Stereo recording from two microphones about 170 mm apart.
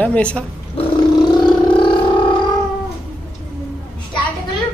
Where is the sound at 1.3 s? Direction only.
25° left (ahead or behind).